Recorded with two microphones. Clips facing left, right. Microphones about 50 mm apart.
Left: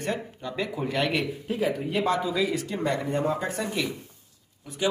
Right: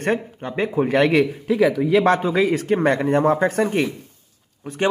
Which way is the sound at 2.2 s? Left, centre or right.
Right.